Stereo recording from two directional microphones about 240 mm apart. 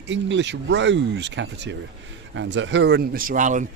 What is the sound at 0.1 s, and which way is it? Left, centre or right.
A man's voice, right.